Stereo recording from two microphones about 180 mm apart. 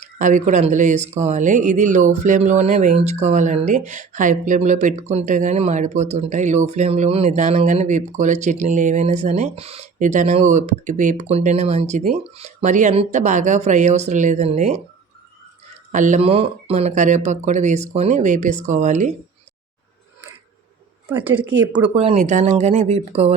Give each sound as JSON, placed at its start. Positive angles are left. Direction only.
{"t": 0.0, "sound": "speech", "side_deg": -45}
{"t": 15.9, "sound": "speech", "side_deg": -45}
{"t": 21.2, "sound": "speech", "side_deg": -10}
{"t": 21.9, "sound": "speech", "side_deg": -35}